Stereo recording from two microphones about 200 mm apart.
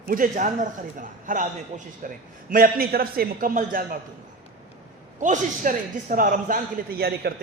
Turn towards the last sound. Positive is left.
turn(degrees=-50)  # may be behind; listen again after turning